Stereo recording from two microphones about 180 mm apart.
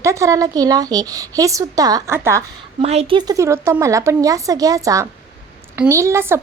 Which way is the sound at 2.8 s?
35° right (ahead or behind).